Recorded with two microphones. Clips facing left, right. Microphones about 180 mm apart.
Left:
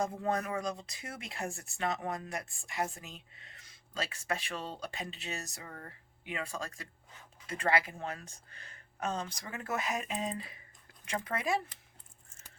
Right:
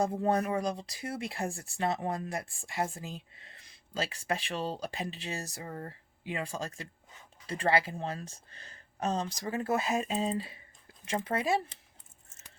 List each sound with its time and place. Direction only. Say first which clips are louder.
0.0 s speech: right 5 dB; 30° right (ahead or behind)